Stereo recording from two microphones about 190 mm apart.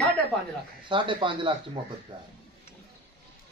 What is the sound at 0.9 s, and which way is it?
Speech, 25° right (ahead or behind).